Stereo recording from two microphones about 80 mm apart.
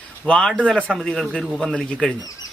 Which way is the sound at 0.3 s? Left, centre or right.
Centre.